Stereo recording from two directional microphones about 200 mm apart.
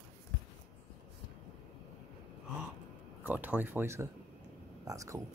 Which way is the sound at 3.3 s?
10° right (ahead or behind).